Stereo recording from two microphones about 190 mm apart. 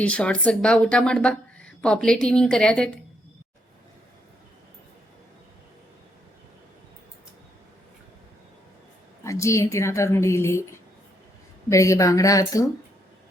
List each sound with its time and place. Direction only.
0.0 s a woman's voice: 5° left (ahead or behind)
9.2 s a woman's voice: 15° left (ahead or behind)
11.7 s a woman's voice: 15° left (ahead or behind)